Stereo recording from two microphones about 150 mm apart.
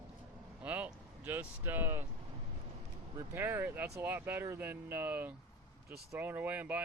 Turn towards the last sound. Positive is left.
turn(degrees=-10)  # may be behind; listen again after turning